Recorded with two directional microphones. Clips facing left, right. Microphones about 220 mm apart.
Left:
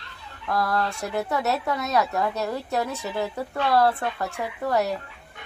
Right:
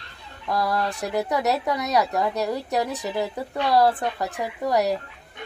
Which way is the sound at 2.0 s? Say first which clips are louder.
Right 1 dB; centre (ahead or behind).